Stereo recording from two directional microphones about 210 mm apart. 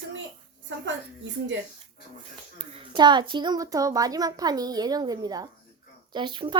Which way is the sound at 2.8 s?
20° right (ahead or behind).